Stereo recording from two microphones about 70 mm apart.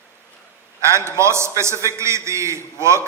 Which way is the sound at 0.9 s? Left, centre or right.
Right.